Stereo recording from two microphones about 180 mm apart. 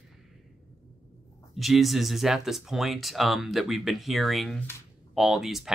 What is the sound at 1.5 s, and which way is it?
Speech, centre (ahead or behind).